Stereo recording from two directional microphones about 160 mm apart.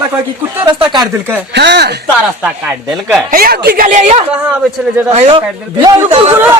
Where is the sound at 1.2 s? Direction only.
15° right (ahead or behind).